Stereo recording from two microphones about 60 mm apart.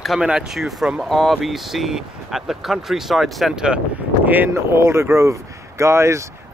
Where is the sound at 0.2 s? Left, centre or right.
Centre.